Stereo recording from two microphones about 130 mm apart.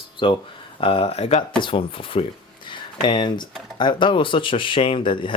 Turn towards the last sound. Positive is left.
turn(degrees=40)  # may be behind; listen again after turning